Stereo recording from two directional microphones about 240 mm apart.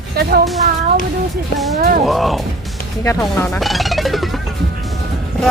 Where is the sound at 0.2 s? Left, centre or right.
Right.